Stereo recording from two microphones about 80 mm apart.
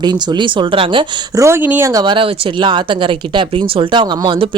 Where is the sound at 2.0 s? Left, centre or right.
Right.